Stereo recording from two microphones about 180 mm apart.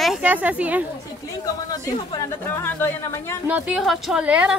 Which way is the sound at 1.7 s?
15° left (ahead or behind).